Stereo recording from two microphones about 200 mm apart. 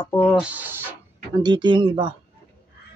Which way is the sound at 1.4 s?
20° right (ahead or behind).